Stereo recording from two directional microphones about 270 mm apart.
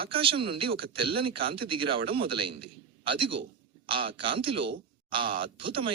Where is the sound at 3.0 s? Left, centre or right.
Centre.